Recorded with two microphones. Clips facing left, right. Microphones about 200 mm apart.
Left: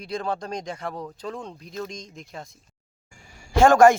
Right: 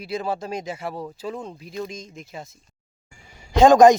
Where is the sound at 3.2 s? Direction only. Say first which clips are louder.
Right 3 dB; 20° right (ahead or behind).